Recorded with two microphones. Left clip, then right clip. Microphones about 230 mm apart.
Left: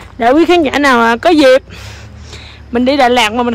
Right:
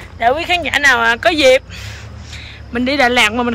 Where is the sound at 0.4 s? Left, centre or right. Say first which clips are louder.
Left 5 dB; left.